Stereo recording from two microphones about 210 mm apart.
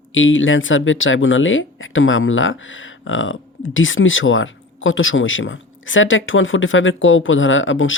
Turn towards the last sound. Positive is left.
turn(degrees=65)  # may be behind; listen again after turning